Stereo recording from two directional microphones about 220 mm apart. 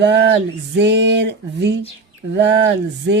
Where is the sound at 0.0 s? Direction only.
50° right (ahead or behind).